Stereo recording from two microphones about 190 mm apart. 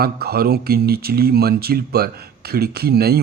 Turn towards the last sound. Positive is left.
turn(degrees=-55)  # may be behind; listen again after turning